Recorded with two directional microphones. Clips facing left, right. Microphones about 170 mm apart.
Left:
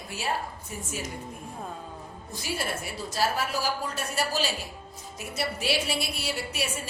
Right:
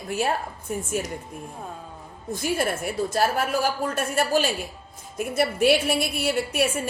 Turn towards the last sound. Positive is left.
turn(degrees=-55)  # may be behind; listen again after turning